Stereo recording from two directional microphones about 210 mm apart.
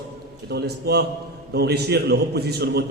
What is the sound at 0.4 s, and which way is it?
A man's voice, 50° right (ahead or behind).